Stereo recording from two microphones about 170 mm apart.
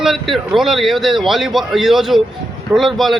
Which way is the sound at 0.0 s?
Centre (ahead or behind).